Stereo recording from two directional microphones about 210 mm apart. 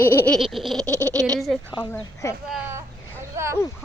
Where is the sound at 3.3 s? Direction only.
15° right (ahead or behind).